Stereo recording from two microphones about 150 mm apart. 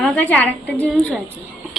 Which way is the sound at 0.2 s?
10° left (ahead or behind).